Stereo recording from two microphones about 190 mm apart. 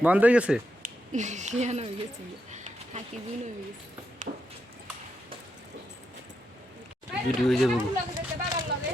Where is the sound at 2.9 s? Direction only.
40° right (ahead or behind).